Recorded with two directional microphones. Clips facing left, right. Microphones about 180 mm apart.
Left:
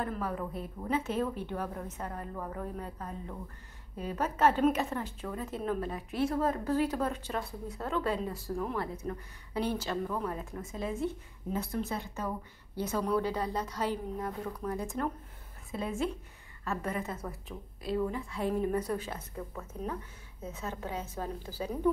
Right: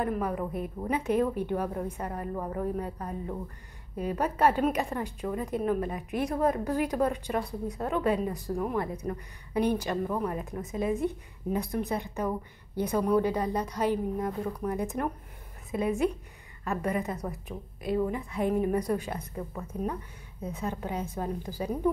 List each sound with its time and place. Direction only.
0.0 s a woman's voice: 15° right (ahead or behind)